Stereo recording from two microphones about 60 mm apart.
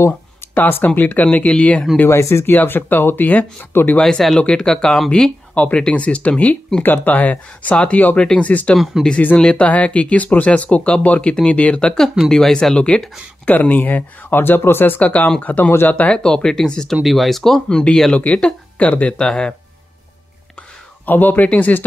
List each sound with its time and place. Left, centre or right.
0.6 s speech: left; by 1.9 s centre
2.0 s speech: left
2.4 s speech: left
4.0 s speech: centre
4.4 s speech: centre
6.8 s speech: left
8.7 s speech: centre
9.4 s speech: centre
12.0 s speech: centre
12.7 s speech: centre; by 15.0 s left
15.0 s speech: left
16.9 s speech: centre
17.6 s speech: centre
21.0 s speech: left